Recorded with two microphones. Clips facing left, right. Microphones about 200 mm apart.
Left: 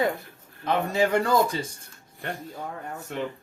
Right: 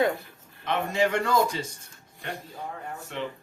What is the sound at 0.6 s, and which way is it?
Speech, 35° left (ahead or behind).